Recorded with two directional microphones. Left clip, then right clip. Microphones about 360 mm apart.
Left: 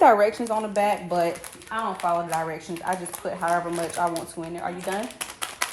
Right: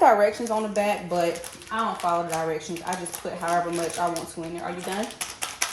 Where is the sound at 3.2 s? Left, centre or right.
Centre.